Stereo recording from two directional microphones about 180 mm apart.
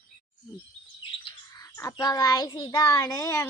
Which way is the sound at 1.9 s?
20° left (ahead or behind).